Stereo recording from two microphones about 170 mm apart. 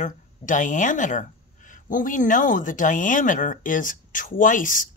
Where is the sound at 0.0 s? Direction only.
50° left (ahead or behind).